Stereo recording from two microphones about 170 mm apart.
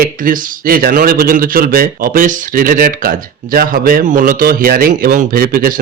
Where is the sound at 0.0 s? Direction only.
60° right (ahead or behind).